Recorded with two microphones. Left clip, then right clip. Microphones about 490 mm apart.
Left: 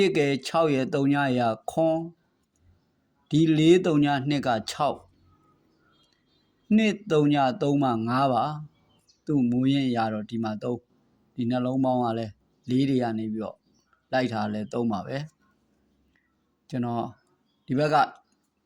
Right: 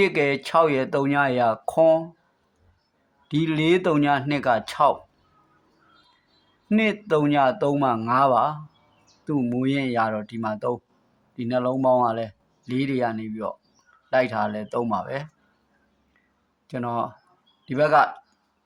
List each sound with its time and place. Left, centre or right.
0.0 s speech: left
3.2 s speech: left
6.7 s speech: left
16.6 s speech: left